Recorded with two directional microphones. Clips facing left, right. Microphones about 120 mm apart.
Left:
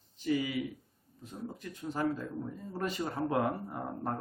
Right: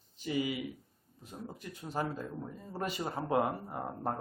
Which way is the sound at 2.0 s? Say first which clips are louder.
Left 3 dB; 20° right (ahead or behind).